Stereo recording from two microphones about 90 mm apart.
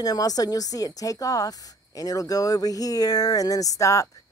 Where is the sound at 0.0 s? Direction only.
45° left (ahead or behind).